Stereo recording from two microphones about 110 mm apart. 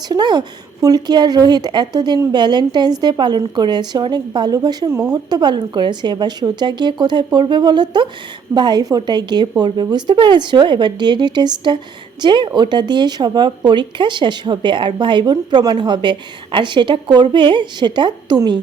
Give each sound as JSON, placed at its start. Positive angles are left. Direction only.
{"t": 0.1, "sound": "a woman's voice", "side_deg": -40}